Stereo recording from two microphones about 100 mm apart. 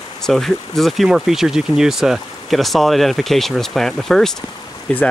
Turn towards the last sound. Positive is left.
turn(degrees=10)  # may be behind; listen again after turning